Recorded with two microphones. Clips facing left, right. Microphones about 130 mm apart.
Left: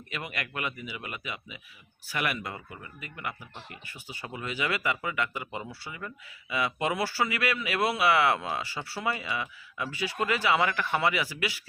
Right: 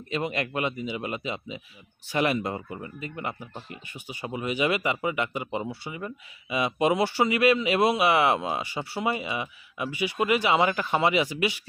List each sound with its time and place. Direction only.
0.1 s speech: 25° right (ahead or behind)